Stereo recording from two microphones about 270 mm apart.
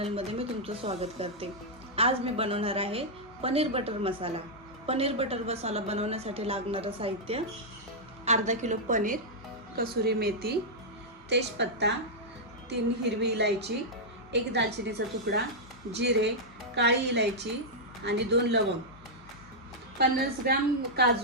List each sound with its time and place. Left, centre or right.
0.0 s a woman's voice: right
20.0 s a woman's voice: right